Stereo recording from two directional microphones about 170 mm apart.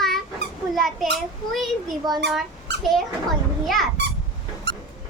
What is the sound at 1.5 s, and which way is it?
A child's voice, centre (ahead or behind).